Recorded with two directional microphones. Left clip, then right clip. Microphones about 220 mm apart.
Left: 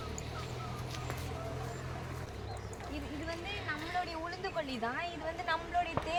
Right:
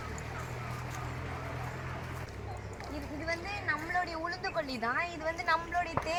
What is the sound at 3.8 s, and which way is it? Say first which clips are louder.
Vehicle: right 4 dB; 5° left (ahead or behind).